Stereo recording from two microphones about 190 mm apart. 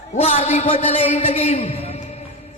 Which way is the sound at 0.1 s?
35° left (ahead or behind).